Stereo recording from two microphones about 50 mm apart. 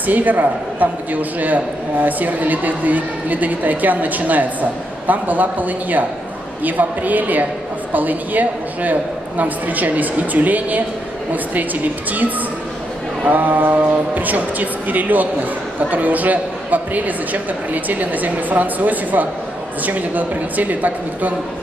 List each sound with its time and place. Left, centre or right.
0.0 s a man's voice: right